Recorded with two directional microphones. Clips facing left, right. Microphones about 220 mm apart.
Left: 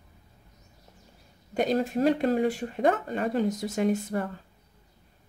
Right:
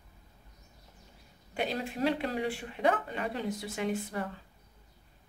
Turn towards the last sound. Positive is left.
turn(degrees=45)  # may be behind; listen again after turning